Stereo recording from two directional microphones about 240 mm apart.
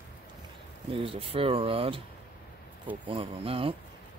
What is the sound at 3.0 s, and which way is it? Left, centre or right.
Speech, right.